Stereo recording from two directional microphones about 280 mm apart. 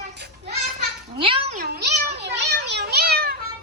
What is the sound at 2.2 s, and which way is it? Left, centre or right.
Children playing, right.